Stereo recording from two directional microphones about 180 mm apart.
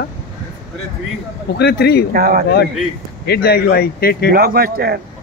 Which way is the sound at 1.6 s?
65° left (ahead or behind).